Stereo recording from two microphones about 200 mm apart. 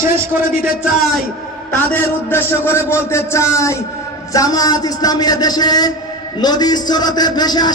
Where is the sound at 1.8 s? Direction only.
10° left (ahead or behind).